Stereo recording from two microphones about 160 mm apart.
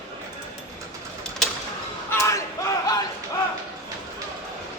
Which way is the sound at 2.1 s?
20° left (ahead or behind).